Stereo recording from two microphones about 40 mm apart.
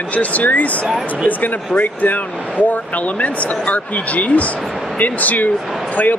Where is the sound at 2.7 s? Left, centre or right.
Left.